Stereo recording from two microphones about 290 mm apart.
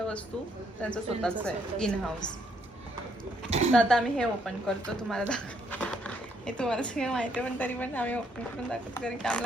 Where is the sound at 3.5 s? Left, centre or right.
Right.